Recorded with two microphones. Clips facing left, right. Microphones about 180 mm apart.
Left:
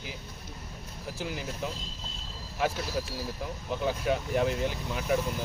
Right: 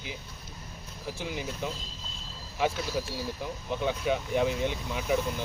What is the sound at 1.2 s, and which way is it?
Speech, centre (ahead or behind).